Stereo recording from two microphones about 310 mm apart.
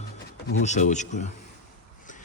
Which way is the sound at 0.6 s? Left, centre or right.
Left.